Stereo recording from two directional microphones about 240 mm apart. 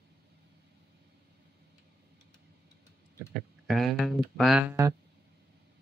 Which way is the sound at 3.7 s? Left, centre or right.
Centre.